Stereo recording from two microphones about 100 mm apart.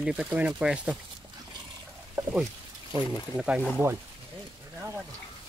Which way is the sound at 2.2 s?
25° right (ahead or behind).